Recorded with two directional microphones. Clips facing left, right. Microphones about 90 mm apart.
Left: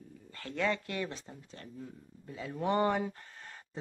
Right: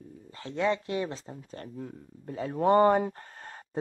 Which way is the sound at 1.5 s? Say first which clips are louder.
Right 7 dB; 45° right (ahead or behind).